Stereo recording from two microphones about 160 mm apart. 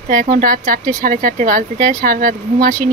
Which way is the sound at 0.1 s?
60° right (ahead or behind).